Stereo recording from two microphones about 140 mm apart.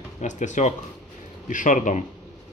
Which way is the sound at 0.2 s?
60° left (ahead or behind).